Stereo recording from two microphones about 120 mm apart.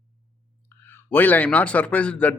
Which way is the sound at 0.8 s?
15° left (ahead or behind).